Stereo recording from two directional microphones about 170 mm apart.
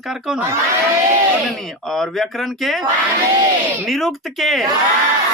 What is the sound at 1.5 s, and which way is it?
Speech, centre (ahead or behind).